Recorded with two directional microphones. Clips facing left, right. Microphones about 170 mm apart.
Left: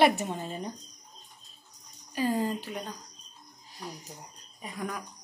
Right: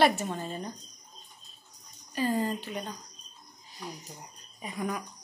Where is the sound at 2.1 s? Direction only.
10° left (ahead or behind).